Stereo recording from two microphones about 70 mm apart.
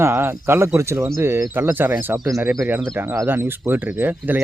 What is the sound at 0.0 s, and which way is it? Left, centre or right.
Speech, right.